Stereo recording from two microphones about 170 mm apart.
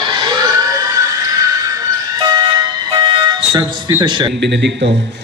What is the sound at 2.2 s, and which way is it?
Fire alarm, 25° right (ahead or behind).